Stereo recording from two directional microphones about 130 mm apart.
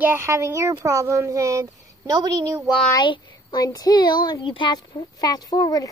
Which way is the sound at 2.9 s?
35° left (ahead or behind).